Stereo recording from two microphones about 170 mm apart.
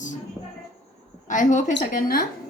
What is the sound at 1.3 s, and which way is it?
Speech, 45° left (ahead or behind).